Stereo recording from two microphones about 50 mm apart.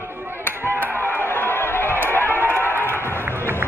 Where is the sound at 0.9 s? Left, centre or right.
Left.